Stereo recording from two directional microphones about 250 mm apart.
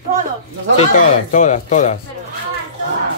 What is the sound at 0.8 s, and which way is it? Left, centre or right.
Speech, left.